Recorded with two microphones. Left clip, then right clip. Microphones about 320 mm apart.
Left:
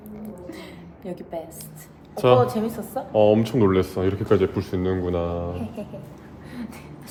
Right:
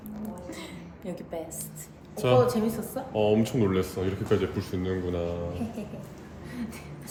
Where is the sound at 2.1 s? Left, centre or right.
Left.